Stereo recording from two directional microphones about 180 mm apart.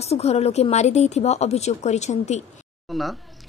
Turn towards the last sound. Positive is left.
turn(degrees=0)  # may be behind; listen again after turning